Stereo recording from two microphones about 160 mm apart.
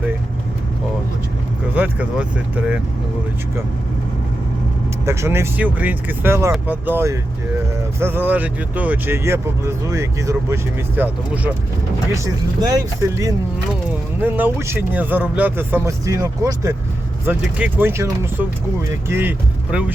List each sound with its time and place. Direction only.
1.7 s speech: 10° right (ahead or behind)
5.0 s speech: 15° right (ahead or behind)